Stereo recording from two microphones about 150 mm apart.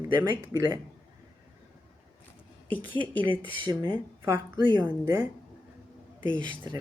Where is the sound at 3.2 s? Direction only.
30° right (ahead or behind); by 5.3 s 15° right (ahead or behind).